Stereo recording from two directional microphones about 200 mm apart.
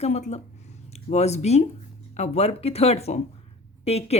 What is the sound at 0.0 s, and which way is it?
A woman's voice, 35° left (ahead or behind).